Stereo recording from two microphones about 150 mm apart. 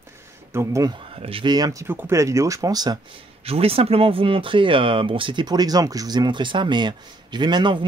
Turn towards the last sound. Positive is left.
turn(degrees=-30)  # may be behind; listen again after turning